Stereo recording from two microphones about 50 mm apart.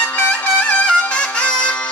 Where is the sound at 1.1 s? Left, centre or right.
Left.